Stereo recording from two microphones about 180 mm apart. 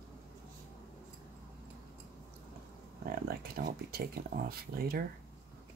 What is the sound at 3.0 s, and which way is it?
Speech, 55° right (ahead or behind).